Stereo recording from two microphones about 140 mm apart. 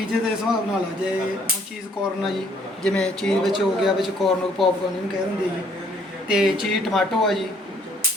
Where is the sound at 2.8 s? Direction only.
5° left (ahead or behind).